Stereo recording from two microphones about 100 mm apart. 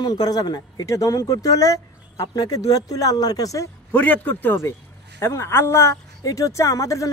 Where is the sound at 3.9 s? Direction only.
20° left (ahead or behind).